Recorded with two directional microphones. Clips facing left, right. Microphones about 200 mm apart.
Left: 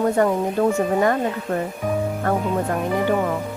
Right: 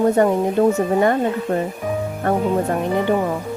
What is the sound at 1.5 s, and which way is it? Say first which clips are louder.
Speech: right 2 dB; 30° right (ahead or behind).